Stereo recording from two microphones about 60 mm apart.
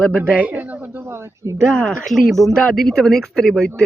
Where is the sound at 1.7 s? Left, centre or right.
Centre.